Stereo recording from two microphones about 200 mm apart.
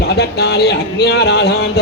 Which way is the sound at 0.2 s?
55° left (ahead or behind).